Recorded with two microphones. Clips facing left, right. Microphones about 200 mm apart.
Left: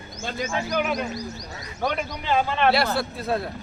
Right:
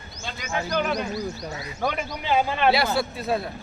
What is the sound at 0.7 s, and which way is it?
Speech, 10° left (ahead or behind).